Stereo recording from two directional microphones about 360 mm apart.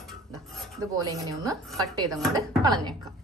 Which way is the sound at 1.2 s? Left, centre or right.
Centre.